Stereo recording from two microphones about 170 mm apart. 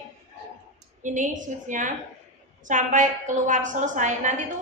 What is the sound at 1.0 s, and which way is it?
A woman's voice, 45° right (ahead or behind).